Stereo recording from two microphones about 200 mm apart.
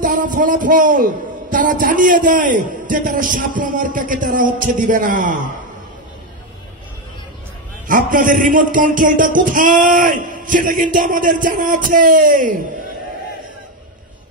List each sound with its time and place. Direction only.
0.0 s a man's voice: 40° right (ahead or behind)
7.8 s a man's voice: 40° right (ahead or behind)